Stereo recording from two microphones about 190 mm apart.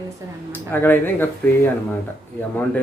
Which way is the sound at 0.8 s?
10° left (ahead or behind).